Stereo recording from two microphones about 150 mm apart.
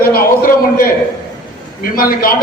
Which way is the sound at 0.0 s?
75° left (ahead or behind).